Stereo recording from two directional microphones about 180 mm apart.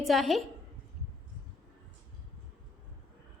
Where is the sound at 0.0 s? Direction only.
Centre (ahead or behind).